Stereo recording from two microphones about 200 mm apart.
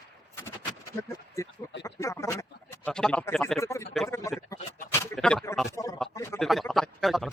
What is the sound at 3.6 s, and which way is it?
Speech, 15° left (ahead or behind).